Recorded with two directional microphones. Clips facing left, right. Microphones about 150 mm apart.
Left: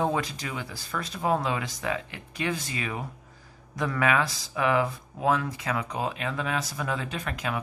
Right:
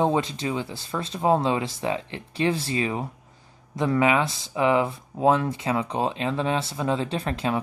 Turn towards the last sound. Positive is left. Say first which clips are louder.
# right 6 dB
turn(degrees=-30)  # may be behind; listen again after turning